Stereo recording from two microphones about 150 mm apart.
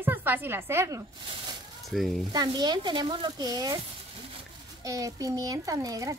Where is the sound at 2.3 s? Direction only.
30° right (ahead or behind).